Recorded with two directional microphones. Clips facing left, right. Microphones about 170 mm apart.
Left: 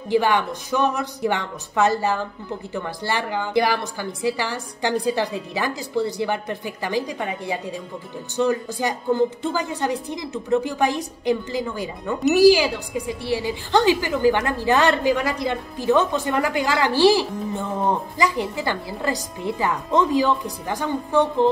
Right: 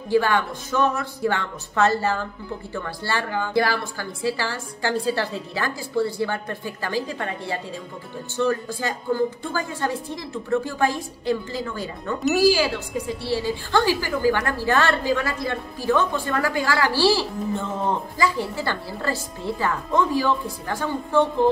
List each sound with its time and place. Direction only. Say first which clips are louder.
0.1 s speech: left 1 dB; 20° left (ahead or behind)